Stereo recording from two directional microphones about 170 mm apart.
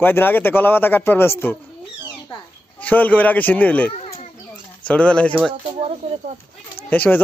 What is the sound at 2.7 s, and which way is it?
A man's voice, 10° left (ahead or behind).